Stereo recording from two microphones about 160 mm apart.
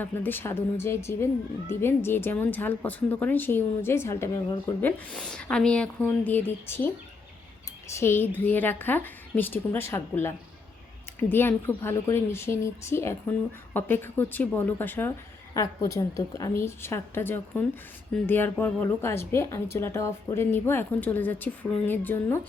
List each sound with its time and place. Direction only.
0.0 s speech: 10° left (ahead or behind)
7.9 s speech: 15° left (ahead or behind)